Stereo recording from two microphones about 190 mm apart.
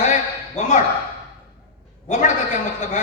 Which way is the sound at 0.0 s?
40° left (ahead or behind).